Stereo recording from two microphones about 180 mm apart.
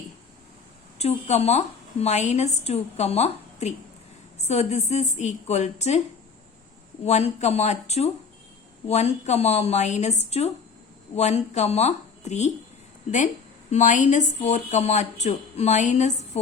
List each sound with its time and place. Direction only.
0.9 s speech: 35° left (ahead or behind)
7.0 s speech: 35° left (ahead or behind)